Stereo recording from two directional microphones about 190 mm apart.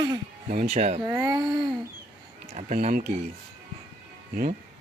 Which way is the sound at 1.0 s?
15° right (ahead or behind).